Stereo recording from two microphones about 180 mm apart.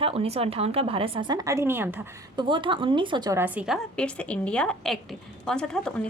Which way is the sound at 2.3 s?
25° right (ahead or behind).